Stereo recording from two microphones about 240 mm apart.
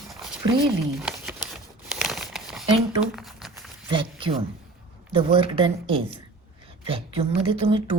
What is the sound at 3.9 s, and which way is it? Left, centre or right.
Speech, right.